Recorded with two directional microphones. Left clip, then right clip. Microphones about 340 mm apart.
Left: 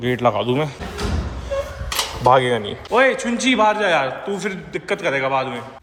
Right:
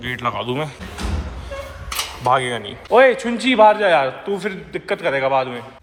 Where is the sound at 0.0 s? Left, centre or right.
Centre.